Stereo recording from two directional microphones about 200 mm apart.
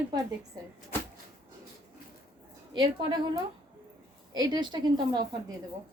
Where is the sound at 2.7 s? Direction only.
25° right (ahead or behind).